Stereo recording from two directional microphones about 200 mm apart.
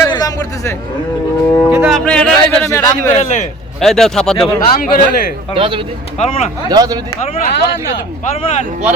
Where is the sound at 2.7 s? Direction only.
15° left (ahead or behind).